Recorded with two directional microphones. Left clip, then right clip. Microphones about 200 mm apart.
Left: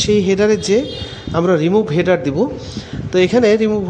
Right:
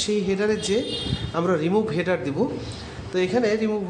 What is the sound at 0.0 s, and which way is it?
A man's voice, 40° left (ahead or behind).